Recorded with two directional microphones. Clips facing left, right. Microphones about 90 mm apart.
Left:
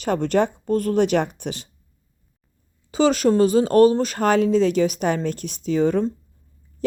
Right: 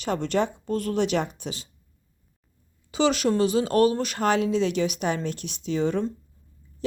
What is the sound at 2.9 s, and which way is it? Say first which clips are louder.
Speech: left 5 dB; 40° left (ahead or behind).